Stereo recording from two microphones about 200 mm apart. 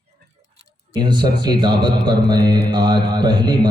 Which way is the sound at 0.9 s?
20° right (ahead or behind).